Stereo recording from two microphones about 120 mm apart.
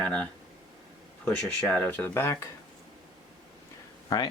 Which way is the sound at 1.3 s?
10° left (ahead or behind).